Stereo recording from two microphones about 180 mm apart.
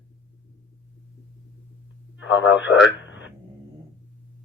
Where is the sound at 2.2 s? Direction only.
90° left.